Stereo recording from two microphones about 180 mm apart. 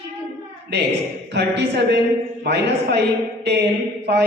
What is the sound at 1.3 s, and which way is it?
Mantra, 75° right (ahead or behind).